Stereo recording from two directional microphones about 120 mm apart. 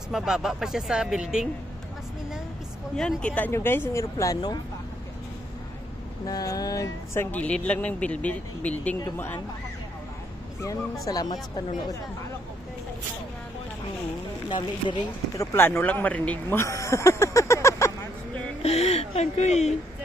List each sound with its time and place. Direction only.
0.1 s speech: 5° right (ahead or behind)
3.0 s speech: 5° left (ahead or behind); by 4.6 s 30° left (ahead or behind)
6.2 s speech: 30° left (ahead or behind)
7.2 s speech: 15° left (ahead or behind)
10.6 s speech: 30° left (ahead or behind)
15.3 s speech: 20° left (ahead or behind)
18.6 s a sound: 60° left (ahead or behind)